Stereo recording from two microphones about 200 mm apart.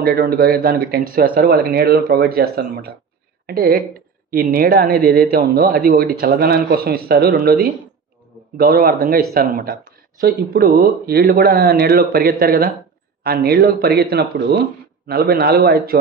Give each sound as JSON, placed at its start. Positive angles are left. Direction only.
{"t": 0.0, "sound": "speech", "side_deg": -50}